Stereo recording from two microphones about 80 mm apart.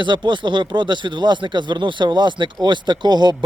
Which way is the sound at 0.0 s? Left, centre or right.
Right.